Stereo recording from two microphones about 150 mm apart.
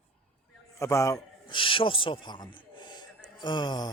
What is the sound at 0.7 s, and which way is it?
Speech, 20° left (ahead or behind).